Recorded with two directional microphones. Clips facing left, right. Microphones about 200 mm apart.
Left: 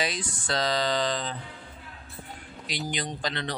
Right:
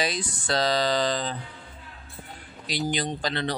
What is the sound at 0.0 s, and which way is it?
Speech, 35° right (ahead or behind).